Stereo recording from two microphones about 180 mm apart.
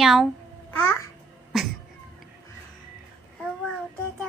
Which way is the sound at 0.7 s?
15° left (ahead or behind).